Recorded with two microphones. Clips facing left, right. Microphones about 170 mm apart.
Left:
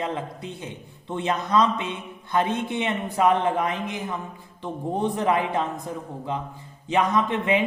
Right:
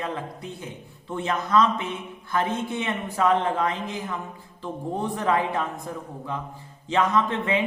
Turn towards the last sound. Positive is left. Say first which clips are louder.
# left 1 dB
turn(degrees=20)  # may be behind; listen again after turning